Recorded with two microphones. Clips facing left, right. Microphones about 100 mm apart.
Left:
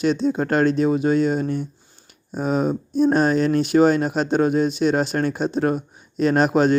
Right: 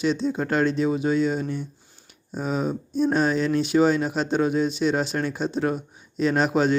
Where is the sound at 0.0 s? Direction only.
55° left (ahead or behind).